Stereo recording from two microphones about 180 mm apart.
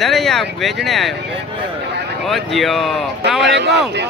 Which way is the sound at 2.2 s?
Centre (ahead or behind).